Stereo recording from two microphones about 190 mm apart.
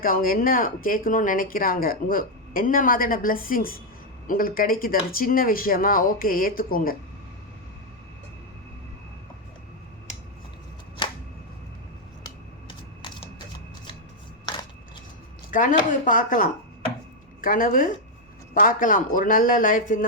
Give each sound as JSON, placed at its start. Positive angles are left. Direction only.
{"t": 0.0, "sound": "speech", "side_deg": 50}
{"t": 11.0, "sound": "a sound", "side_deg": 25}
{"t": 12.2, "sound": "typewriter", "side_deg": 25}
{"t": 15.4, "sound": "speech", "side_deg": 45}